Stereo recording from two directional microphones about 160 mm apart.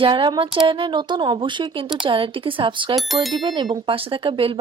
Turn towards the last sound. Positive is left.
turn(degrees=-35)  # may be behind; listen again after turning